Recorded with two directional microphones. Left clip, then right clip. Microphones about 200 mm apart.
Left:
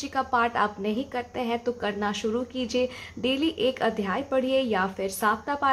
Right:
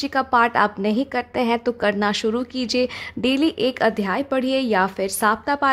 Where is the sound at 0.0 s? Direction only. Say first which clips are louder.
Right 7 dB; 40° right (ahead or behind).